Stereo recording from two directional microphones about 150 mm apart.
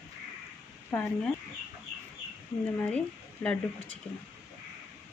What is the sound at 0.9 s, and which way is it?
Speech, 10° left (ahead or behind).